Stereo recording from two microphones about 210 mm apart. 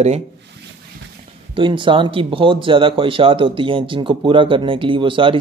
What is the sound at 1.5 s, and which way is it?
Speech, 25° right (ahead or behind).